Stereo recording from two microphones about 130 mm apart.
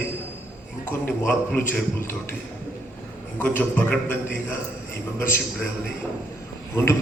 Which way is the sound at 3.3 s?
15° left (ahead or behind).